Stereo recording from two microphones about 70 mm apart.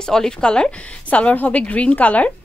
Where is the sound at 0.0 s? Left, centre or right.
Centre.